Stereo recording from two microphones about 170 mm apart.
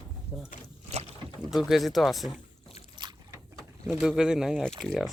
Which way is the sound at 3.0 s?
25° right (ahead or behind).